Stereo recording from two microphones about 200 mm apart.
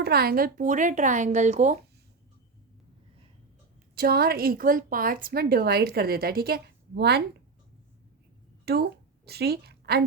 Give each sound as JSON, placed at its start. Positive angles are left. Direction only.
{"t": 0.0, "sound": "speech", "side_deg": -50}
{"t": 3.9, "sound": "a woman's voice", "side_deg": -50}
{"t": 8.6, "sound": "a woman's voice", "side_deg": -55}